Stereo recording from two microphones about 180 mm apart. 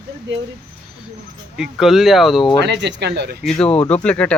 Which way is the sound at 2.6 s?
75° right (ahead or behind).